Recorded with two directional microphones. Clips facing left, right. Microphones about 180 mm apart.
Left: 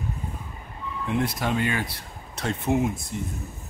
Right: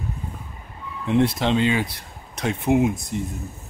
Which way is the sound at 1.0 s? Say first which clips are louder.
Right 6 dB; 30° right (ahead or behind).